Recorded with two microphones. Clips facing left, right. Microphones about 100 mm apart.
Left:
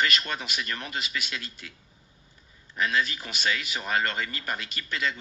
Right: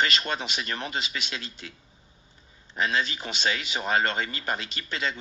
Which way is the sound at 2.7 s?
25° right (ahead or behind).